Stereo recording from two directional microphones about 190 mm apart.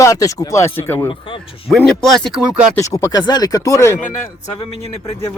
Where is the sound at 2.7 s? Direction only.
15° left (ahead or behind).